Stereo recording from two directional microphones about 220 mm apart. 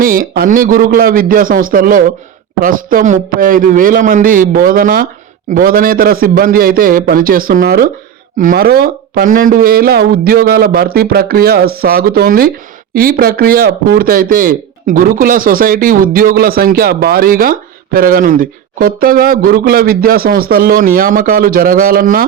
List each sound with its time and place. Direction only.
0.0 s speech: 40° right (ahead or behind)